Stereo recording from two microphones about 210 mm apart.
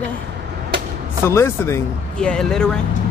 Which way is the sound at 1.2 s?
10° left (ahead or behind).